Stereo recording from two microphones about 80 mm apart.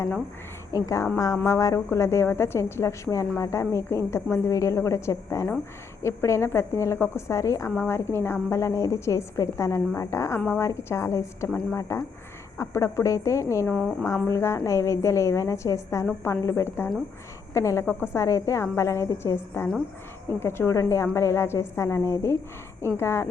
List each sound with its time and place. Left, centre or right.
0.7 s a woman's voice: left
17.5 s a woman's voice: left